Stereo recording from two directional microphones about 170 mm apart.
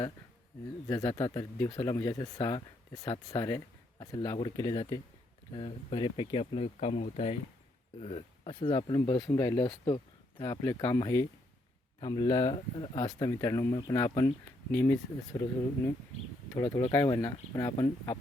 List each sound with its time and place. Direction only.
0.9 s speech: 20° left (ahead or behind)
16.6 s speech: 15° left (ahead or behind)